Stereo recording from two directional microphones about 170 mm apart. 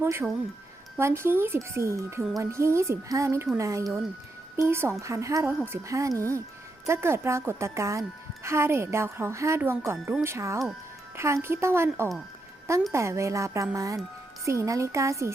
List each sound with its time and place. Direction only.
0.0 s speech: 15° right (ahead or behind)